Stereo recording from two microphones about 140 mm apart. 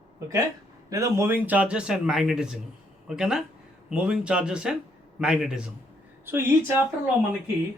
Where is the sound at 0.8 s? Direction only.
25° right (ahead or behind).